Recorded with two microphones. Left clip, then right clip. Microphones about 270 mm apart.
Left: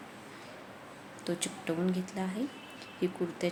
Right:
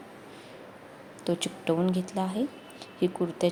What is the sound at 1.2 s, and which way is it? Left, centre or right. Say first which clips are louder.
A woman's voice: right 6 dB; centre.